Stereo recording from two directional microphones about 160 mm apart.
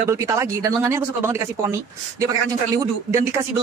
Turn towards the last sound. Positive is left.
turn(degrees=-20)  # may be behind; listen again after turning